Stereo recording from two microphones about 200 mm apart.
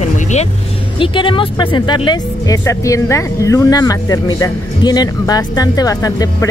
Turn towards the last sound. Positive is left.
turn(degrees=15)  # may be behind; listen again after turning